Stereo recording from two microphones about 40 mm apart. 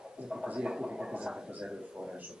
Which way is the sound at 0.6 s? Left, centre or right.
Centre.